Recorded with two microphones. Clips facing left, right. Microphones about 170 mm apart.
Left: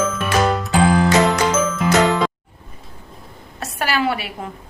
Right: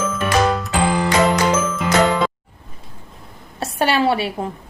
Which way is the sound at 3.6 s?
30° right (ahead or behind).